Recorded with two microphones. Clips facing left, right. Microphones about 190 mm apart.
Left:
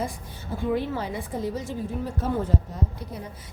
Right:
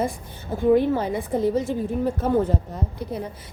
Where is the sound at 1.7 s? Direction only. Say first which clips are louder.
Right 6 dB; 60° right (ahead or behind).